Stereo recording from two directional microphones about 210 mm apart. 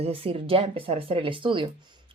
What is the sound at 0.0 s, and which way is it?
Speech, 25° right (ahead or behind).